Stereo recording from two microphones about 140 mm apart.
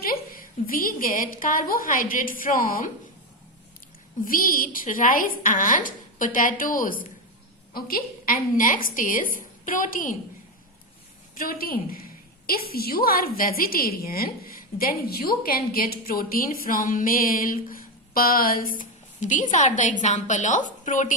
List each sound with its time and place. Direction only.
0.0 s a woman's voice: 90° left
4.3 s a woman's voice: 90° left
7.7 s a woman's voice: 90° left; by 10.2 s 75° left (ahead or behind)
11.3 s a woman's voice: 90° left; by 21.2 s 65° left (ahead or behind)